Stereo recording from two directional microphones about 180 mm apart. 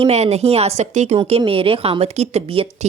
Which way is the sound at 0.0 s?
35° right (ahead or behind).